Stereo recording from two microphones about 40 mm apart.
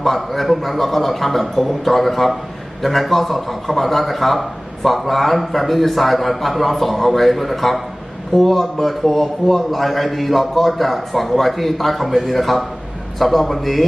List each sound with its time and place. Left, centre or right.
0.0 s a man's voice: centre